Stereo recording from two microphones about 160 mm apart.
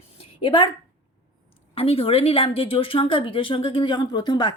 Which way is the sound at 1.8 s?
35° left (ahead or behind).